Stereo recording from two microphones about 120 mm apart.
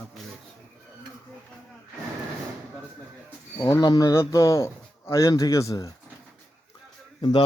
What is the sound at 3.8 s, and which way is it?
Speech, 30° left (ahead or behind).